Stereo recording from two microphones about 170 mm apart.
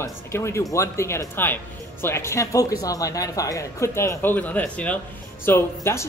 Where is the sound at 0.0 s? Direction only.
15° left (ahead or behind).